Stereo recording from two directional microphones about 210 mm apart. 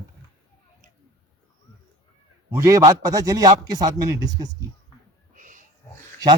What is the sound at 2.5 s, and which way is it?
A man's voice, 15° right (ahead or behind).